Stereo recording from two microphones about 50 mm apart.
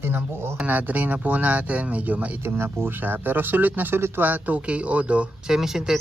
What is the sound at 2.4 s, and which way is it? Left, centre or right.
Speech, right.